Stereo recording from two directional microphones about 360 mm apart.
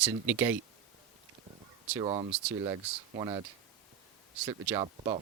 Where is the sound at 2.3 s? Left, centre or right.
Centre.